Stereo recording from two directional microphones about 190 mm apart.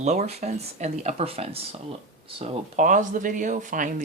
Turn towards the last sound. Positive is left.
turn(degrees=-40)  # may be behind; listen again after turning